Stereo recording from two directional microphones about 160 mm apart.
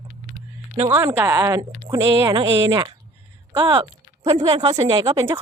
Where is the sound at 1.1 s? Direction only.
15° right (ahead or behind).